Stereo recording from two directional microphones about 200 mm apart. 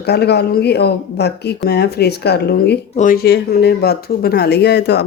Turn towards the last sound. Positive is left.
turn(degrees=55)  # may be behind; listen again after turning